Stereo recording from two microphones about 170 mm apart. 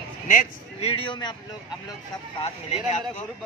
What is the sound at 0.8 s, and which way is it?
Speech, 30° left (ahead or behind).